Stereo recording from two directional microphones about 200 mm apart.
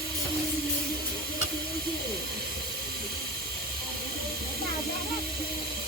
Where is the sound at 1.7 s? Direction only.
50° right (ahead or behind).